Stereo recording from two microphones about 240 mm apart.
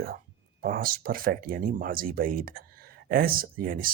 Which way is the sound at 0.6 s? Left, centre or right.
Right.